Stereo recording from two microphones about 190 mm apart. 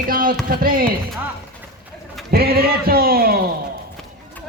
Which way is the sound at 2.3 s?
55° right (ahead or behind).